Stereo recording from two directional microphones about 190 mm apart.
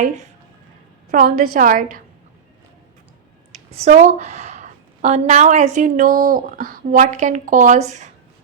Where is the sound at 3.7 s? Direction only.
35° right (ahead or behind).